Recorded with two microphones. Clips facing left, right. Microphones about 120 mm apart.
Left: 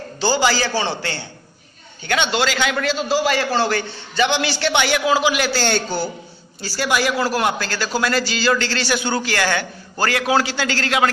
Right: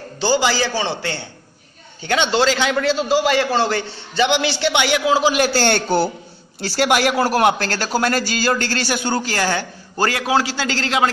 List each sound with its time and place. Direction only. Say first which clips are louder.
0.2 s a man's voice: right 1 dB; 20° right (ahead or behind)
2.0 s a man's voice: right 3 dB; 30° right (ahead or behind)
5.2 s speech: right 3 dB; 40° right (ahead or behind)